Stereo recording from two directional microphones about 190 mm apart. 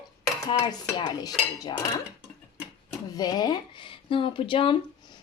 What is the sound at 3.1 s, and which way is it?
Speech, 20° left (ahead or behind).